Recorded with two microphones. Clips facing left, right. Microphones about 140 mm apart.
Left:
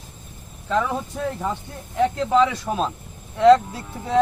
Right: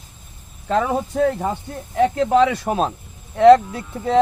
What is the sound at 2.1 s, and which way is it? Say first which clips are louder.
Speech: right 3 dB; 60° right (ahead or behind).